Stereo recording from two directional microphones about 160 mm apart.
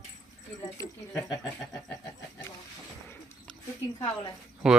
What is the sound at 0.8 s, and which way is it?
Speech, 20° left (ahead or behind).